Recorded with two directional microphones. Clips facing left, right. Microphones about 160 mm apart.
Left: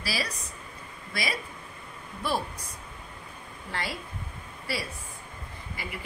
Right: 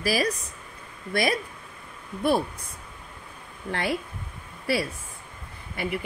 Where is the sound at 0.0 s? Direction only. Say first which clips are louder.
Right 9 dB; 45° right (ahead or behind).